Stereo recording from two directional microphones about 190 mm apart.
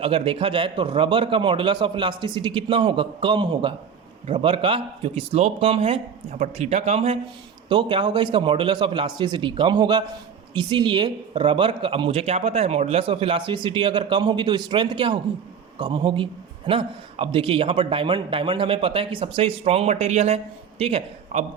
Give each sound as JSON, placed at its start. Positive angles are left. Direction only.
{"t": 0.0, "sound": "a man's voice", "side_deg": -30}